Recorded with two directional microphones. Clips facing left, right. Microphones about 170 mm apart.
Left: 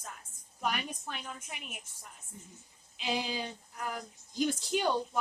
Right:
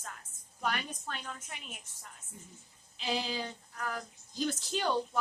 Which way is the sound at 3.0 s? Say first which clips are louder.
Even; 15° left (ahead or behind).